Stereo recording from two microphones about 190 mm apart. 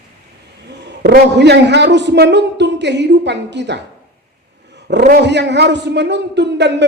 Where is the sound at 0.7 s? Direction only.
60° right (ahead or behind).